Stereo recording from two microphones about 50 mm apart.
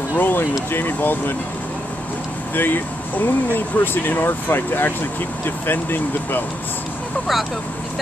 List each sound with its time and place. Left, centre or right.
0.2 s speech: left
2.5 s speech: left